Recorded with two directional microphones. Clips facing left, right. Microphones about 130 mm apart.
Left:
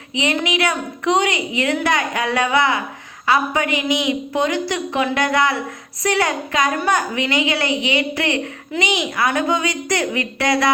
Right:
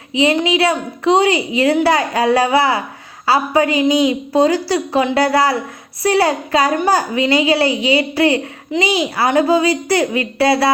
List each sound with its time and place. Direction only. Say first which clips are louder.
0.2 s a child's voice: right 6 dB; 30° right (ahead or behind)